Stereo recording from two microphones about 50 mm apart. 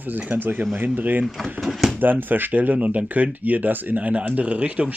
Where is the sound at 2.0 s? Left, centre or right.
Right.